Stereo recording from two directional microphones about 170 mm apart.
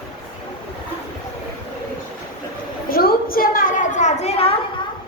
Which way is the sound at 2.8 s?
60° left (ahead or behind).